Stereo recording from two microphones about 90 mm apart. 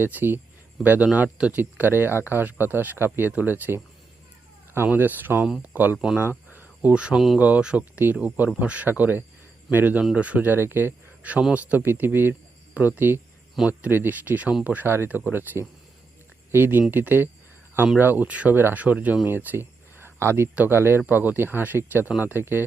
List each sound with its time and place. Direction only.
0.0 s speech: 20° right (ahead or behind)
6.1 s cricket: 20° right (ahead or behind)
7.3 s speech: 15° right (ahead or behind)